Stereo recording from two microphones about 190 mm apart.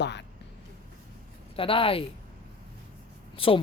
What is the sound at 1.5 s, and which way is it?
Speech, 30° left (ahead or behind).